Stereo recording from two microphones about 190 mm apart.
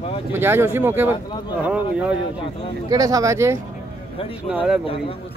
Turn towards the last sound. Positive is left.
turn(degrees=-5)  # may be behind; listen again after turning